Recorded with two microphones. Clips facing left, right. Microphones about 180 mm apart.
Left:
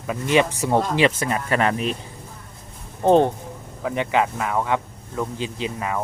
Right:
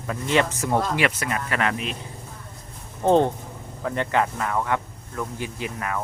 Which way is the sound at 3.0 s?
15° left (ahead or behind).